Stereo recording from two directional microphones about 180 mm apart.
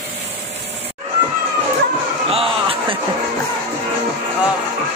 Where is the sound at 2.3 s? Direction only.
30° right (ahead or behind).